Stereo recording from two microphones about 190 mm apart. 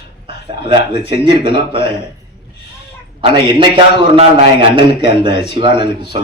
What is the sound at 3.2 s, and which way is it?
A man's voice, 25° right (ahead or behind).